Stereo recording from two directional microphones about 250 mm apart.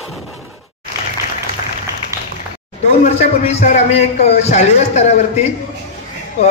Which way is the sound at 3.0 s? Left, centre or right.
Left.